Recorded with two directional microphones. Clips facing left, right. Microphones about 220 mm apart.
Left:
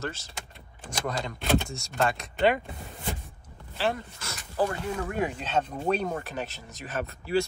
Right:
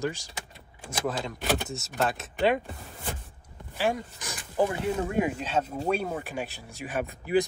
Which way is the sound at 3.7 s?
10° right (ahead or behind).